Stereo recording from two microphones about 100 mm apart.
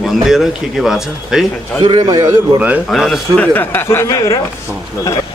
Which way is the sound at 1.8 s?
45° right (ahead or behind).